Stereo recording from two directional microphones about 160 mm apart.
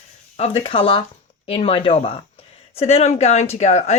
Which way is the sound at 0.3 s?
40° left (ahead or behind).